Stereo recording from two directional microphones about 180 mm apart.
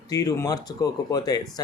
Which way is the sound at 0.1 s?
20° left (ahead or behind).